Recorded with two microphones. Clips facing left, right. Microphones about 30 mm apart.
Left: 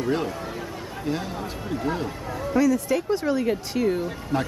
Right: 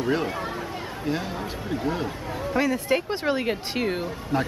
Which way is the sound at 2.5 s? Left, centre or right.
Right.